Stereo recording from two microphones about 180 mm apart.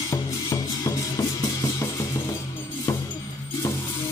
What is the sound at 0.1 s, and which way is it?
Music, 20° left (ahead or behind).